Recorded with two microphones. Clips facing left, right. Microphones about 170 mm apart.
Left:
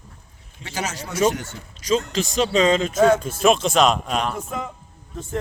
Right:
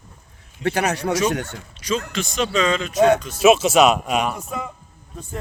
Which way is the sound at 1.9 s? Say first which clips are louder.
Left 3 dB; 35° left (ahead or behind).